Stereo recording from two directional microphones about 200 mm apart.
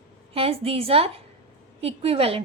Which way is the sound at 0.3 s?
30° right (ahead or behind).